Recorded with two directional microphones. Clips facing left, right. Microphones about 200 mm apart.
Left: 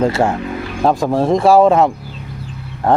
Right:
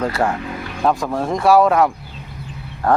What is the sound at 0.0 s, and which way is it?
Speech, 25° left (ahead or behind).